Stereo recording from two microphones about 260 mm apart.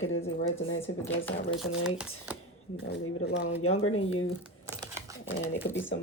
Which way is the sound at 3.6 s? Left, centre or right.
Left.